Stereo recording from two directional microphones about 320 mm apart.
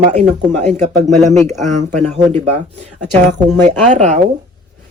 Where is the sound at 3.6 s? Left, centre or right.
Right.